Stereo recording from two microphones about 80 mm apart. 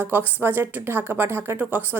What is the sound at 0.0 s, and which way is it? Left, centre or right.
A woman's voice, right.